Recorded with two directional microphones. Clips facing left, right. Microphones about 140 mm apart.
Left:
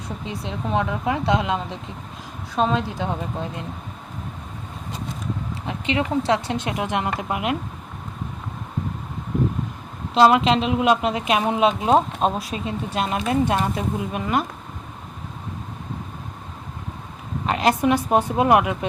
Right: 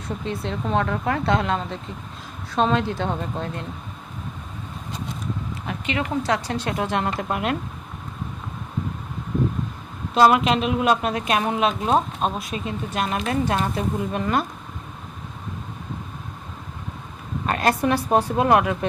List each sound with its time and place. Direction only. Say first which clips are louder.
0.3 s speech: right 1 dB; 15° left (ahead or behind)
5.6 s a woman's voice: left 3 dB; 25° left (ahead or behind)
10.2 s a woman's voice: left 1 dB; 25° left (ahead or behind)
17.4 s a woman's voice: left 2 dB; 20° left (ahead or behind)